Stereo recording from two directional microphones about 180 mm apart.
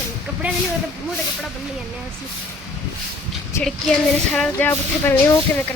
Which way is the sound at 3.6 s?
15° left (ahead or behind).